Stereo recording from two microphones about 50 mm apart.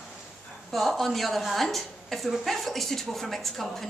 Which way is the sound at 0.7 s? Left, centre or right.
Centre.